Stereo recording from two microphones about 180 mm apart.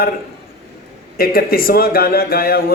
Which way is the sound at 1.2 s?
55° left (ahead or behind).